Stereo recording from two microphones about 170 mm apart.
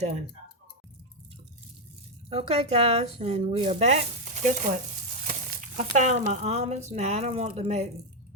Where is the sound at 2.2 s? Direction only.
35° right (ahead or behind).